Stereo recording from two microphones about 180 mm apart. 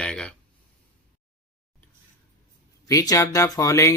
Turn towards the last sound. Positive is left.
turn(degrees=15)  # may be behind; listen again after turning